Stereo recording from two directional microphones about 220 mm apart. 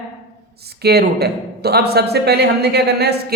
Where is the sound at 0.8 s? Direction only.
45° right (ahead or behind).